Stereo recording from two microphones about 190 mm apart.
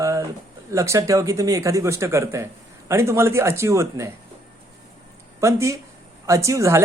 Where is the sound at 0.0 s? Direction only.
15° right (ahead or behind).